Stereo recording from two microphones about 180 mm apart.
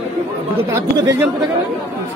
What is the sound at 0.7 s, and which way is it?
Speech, 15° right (ahead or behind).